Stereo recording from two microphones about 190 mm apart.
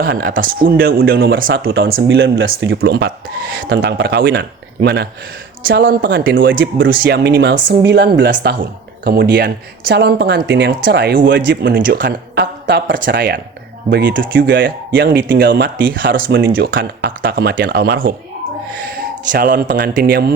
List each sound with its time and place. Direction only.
0.0 s speech: 50° right (ahead or behind); by 6.5 s 70° right (ahead or behind)
6.8 s speech: 55° right (ahead or behind)
11.3 s speech: 70° right (ahead or behind)
12.0 s speech: 60° right (ahead or behind)
15.2 s speech: 50° right (ahead or behind)
15.4 s speech: 65° right (ahead or behind)
16.1 s speech: 50° right (ahead or behind)